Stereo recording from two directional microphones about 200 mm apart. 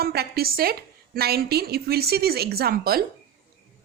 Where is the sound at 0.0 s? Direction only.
50° right (ahead or behind).